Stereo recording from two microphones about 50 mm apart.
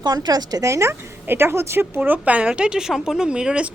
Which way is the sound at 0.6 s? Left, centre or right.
Right.